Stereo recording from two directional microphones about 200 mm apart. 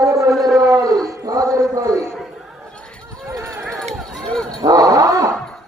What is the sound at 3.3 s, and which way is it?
Run, 15° right (ahead or behind).